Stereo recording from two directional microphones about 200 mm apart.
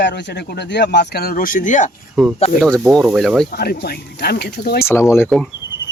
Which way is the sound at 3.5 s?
55° left (ahead or behind).